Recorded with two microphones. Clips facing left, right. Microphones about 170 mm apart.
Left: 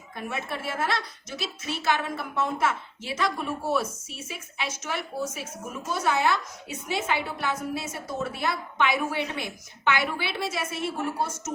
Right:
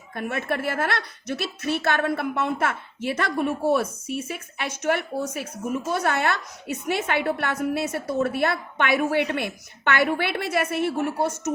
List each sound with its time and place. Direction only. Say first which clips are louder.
0.1 s a woman's voice: right 6 dB; 55° right (ahead or behind)